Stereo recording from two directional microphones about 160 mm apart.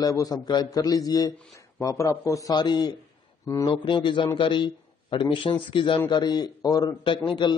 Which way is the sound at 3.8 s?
30° left (ahead or behind).